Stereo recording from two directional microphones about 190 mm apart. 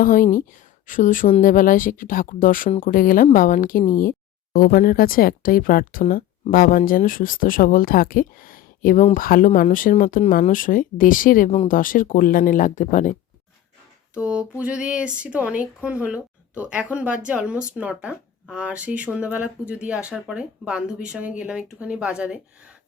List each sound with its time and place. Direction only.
0.0 s speech: 45° left (ahead or behind)
14.2 s speech: 5° right (ahead or behind)